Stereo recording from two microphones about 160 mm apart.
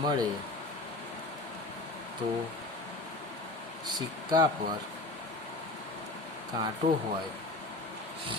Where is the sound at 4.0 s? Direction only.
25° right (ahead or behind).